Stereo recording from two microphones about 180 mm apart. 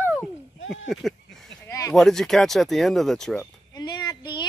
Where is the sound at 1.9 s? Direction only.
Centre (ahead or behind).